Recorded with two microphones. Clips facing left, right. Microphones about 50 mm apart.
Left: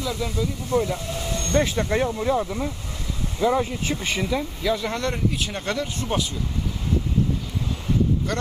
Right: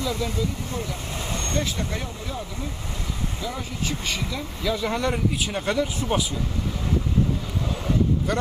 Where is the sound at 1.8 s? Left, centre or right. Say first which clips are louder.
Left 10 dB; left.